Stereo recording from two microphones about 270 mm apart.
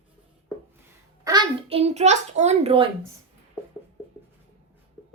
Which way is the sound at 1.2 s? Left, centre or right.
Centre.